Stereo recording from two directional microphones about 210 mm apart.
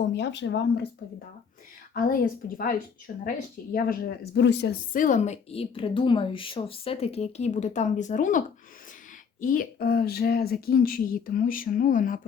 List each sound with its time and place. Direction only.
0.1 s speech: 55° left (ahead or behind)
1.9 s a woman's voice: 40° left (ahead or behind)